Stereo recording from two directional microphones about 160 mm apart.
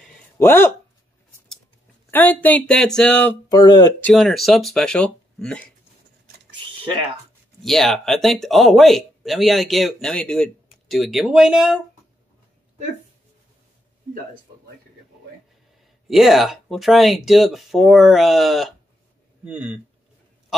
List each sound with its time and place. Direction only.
0.4 s speech: 15° left (ahead or behind)
2.0 s speech: 10° left (ahead or behind)
3.4 s speech: 25° left (ahead or behind)
4.0 s speech: centre (ahead or behind)
6.5 s typing: 30° right (ahead or behind)
7.6 s speech: centre (ahead or behind)
16.1 s speech: centre (ahead or behind)